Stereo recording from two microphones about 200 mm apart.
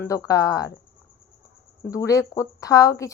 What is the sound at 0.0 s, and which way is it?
Speech, 15° left (ahead or behind).